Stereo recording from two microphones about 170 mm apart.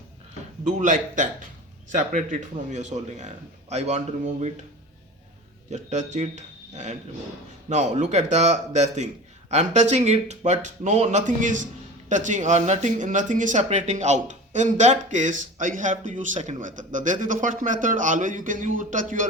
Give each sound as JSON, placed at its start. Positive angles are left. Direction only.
{"t": 0.8, "sound": "speech", "side_deg": -45}
{"t": 5.7, "sound": "speech", "side_deg": -45}